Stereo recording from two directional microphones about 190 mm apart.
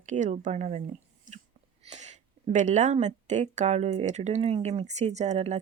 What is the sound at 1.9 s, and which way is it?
Speech, 35° right (ahead or behind).